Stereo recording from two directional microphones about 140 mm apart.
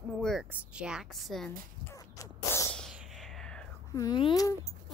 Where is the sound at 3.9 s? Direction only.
25° left (ahead or behind).